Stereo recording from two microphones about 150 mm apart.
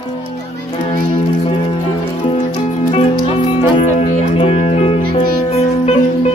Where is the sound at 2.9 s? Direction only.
35° left (ahead or behind).